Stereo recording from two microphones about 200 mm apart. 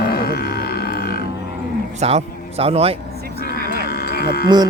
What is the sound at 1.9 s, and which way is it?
A man's voice, 35° right (ahead or behind).